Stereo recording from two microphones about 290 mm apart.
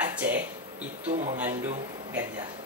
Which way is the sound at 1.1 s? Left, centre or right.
Right.